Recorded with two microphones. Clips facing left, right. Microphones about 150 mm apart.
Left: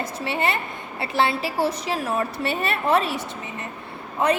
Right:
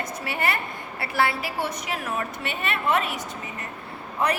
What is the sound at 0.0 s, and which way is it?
A woman's voice, 25° left (ahead or behind).